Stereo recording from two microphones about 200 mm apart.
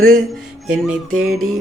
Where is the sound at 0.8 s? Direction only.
Centre (ahead or behind).